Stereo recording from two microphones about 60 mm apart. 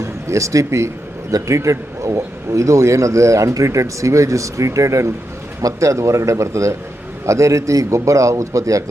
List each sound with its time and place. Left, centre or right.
0.0 s a man's voice: right